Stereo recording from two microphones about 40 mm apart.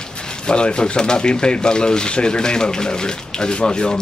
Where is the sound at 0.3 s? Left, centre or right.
Left.